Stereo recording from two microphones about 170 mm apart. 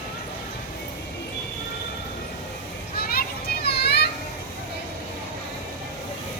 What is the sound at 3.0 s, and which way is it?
Children playing, 65° left (ahead or behind).